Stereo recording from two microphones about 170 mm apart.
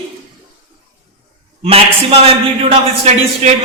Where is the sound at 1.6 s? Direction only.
35° right (ahead or behind).